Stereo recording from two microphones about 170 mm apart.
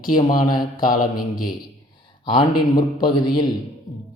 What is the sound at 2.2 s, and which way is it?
Speech, 25° left (ahead or behind).